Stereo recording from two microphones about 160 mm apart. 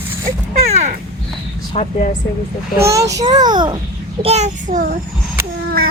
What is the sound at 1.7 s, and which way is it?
Speech, 35° left (ahead or behind).